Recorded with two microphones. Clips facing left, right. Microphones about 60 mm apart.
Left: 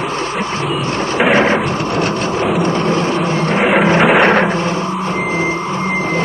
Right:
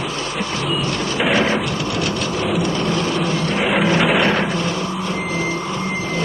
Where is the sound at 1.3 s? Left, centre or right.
Left.